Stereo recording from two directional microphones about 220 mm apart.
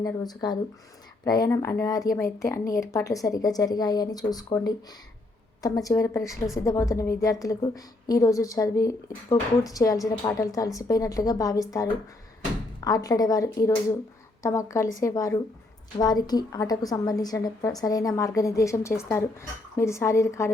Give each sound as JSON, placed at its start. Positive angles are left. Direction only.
{"t": 0.0, "sound": "a woman's voice", "side_deg": 20}